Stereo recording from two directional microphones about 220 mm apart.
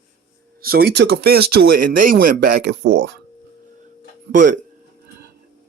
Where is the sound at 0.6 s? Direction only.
45° right (ahead or behind).